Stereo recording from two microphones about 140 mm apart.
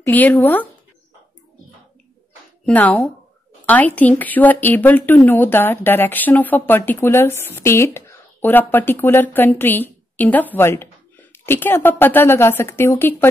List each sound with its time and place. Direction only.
0.0 s speech: 10° left (ahead or behind)
2.6 s speech: 10° left (ahead or behind)